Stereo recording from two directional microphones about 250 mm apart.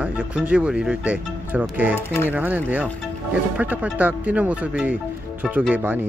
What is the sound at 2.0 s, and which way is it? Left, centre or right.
Speech, centre.